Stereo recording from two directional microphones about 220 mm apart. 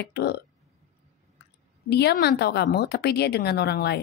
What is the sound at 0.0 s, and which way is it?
Speech, 50° left (ahead or behind).